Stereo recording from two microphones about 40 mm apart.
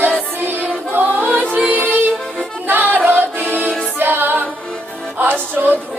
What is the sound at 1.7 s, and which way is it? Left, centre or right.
Music, right.